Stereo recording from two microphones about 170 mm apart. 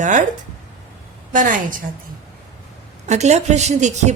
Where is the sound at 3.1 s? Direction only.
40° right (ahead or behind).